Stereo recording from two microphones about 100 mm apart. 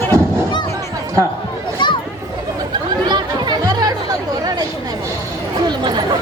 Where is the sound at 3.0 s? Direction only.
50° right (ahead or behind).